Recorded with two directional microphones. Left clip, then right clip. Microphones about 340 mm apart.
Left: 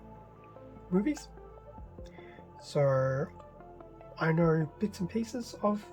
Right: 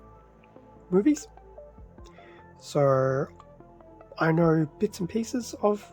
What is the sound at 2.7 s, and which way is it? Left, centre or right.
Speech, centre.